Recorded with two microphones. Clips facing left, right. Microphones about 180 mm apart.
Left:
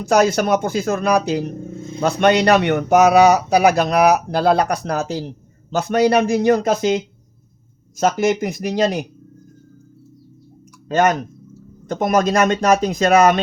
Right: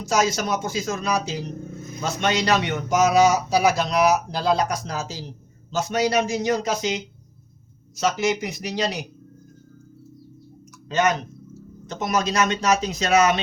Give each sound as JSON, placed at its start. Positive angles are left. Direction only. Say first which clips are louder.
{"t": 0.0, "sound": "speech", "louder": "left 7 dB", "side_deg": 60}
{"t": 10.8, "sound": "speech", "louder": "left 5 dB", "side_deg": 50}